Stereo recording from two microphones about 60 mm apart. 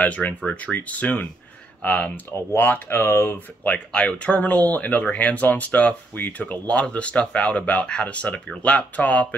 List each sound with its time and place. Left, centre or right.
0.0 s speech: left
3.3 s speech: left